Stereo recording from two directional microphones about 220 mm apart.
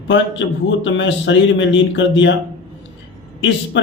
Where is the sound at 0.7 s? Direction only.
55° left (ahead or behind).